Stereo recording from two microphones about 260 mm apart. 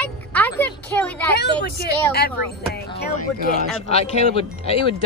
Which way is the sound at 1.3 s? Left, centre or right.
Left.